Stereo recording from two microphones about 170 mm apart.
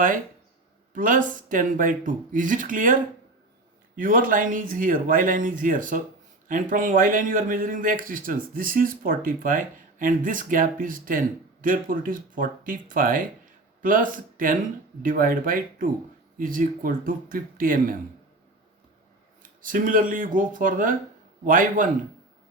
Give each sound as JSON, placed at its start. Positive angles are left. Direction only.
{"t": 0.9, "sound": "a man's voice", "side_deg": -55}
{"t": 3.9, "sound": "a man's voice", "side_deg": -55}
{"t": 19.4, "sound": "a man's voice", "side_deg": -50}